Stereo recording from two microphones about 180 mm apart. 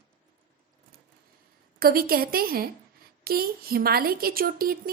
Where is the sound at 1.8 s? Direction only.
55° right (ahead or behind).